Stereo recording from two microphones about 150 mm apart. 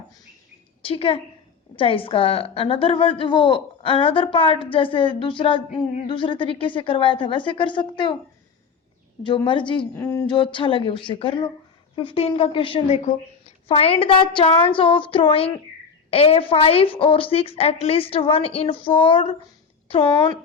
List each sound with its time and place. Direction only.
0.8 s a woman's voice: 40° left (ahead or behind)
9.2 s a woman's voice: 30° left (ahead or behind)
9.9 s speech: 15° left (ahead or behind)
10.2 s a woman's voice: 35° left (ahead or behind)